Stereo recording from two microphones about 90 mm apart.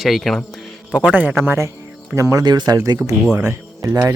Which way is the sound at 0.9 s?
15° right (ahead or behind).